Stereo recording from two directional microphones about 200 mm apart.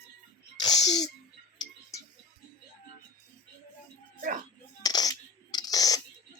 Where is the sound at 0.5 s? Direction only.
20° left (ahead or behind).